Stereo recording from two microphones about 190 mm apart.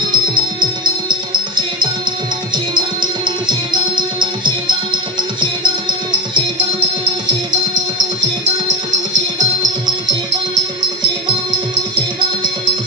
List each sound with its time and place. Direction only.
0.1 s music: 25° right (ahead or behind)